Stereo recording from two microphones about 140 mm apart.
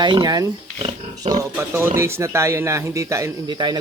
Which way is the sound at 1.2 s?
50° right (ahead or behind).